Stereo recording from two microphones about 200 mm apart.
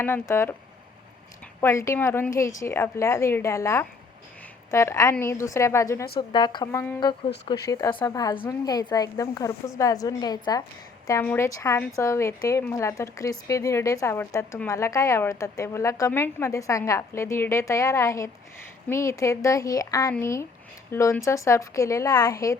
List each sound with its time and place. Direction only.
0.0 s a woman's voice: 10° left (ahead or behind)
1.6 s a woman's voice: 15° left (ahead or behind)